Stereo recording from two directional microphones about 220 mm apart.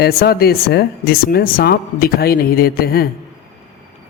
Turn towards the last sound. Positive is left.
turn(degrees=45)  # may be behind; listen again after turning